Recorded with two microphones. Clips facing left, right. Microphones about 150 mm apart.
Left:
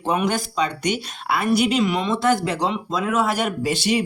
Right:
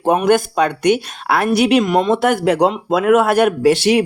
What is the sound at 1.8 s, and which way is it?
A man's voice, 50° right (ahead or behind).